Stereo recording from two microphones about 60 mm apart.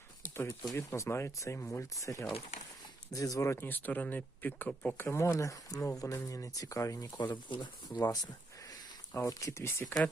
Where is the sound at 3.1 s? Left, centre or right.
Left.